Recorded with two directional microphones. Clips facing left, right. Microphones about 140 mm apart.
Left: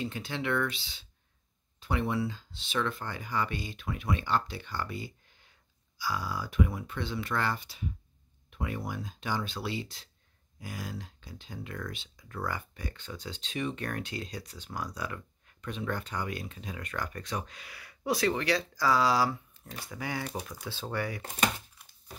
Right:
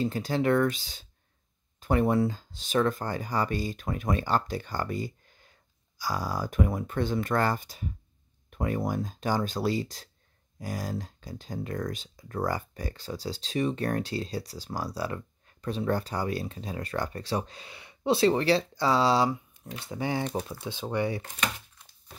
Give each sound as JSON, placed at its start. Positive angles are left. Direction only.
{"t": 0.0, "sound": "speech", "side_deg": -40}
{"t": 20.6, "sound": "speech", "side_deg": -20}
{"t": 21.2, "sound": "speech", "side_deg": 35}